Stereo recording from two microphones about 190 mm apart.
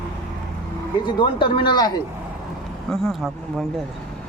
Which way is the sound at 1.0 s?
25° left (ahead or behind).